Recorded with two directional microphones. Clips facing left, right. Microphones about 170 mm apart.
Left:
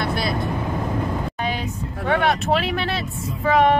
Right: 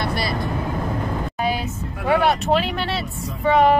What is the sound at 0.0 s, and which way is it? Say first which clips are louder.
Vehicle: left 1 dB; centre (ahead or behind).